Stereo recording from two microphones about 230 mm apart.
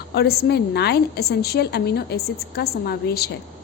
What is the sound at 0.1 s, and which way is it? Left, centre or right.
A woman's voice, left.